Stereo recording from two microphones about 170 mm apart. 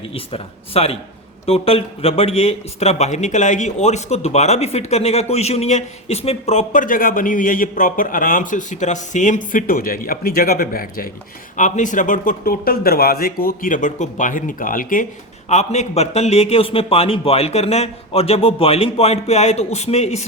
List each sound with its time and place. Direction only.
0.1 s a man's voice: 35° left (ahead or behind); by 11.1 s 60° left (ahead or behind)
11.5 s a man's voice: 50° left (ahead or behind)
15.4 s a man's voice: 40° left (ahead or behind)